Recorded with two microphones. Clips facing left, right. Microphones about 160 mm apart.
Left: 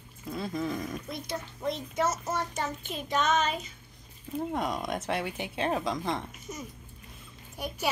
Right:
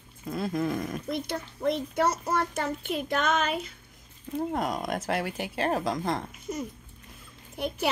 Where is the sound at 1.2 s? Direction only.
60° right (ahead or behind).